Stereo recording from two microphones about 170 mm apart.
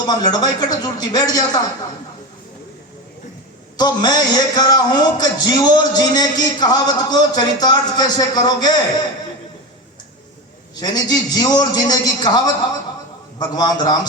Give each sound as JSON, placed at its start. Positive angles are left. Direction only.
{"t": 0.0, "sound": "a man's voice", "side_deg": 25}
{"t": 3.8, "sound": "a man's voice", "side_deg": 25}
{"t": 10.8, "sound": "a man's voice", "side_deg": 25}
{"t": 13.7, "sound": "a man's voice", "side_deg": 25}